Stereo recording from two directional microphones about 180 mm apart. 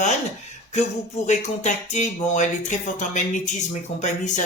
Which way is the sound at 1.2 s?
40° left (ahead or behind).